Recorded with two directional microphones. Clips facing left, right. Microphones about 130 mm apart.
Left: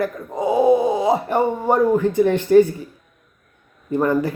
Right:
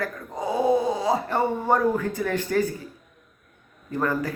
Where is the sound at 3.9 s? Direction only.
20° left (ahead or behind).